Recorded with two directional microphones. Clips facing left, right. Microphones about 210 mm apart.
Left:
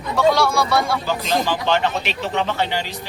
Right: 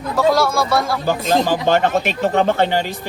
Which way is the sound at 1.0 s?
50° right (ahead or behind).